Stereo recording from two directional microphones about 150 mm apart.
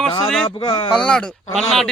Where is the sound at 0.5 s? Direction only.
30° left (ahead or behind).